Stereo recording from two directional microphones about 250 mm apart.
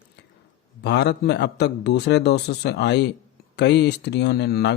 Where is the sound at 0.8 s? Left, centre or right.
Left.